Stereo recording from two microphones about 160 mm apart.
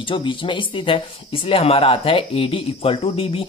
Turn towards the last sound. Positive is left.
turn(degrees=40)  # may be behind; listen again after turning